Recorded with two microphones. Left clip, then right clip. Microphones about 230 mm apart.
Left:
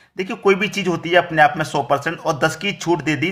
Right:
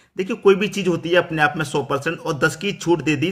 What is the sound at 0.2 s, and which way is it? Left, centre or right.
Speech, centre.